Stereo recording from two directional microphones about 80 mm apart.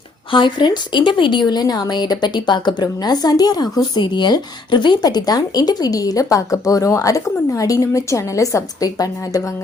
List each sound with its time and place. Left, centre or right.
0.3 s speech: left